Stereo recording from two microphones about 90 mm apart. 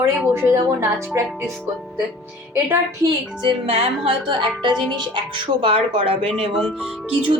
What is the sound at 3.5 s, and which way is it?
Speech, 90° right.